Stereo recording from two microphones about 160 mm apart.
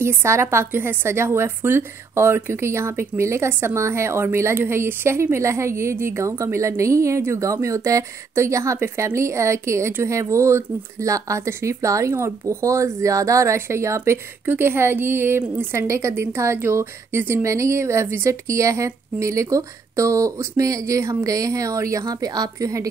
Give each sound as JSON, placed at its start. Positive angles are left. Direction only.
{"t": 0.0, "sound": "a woman's voice", "side_deg": -15}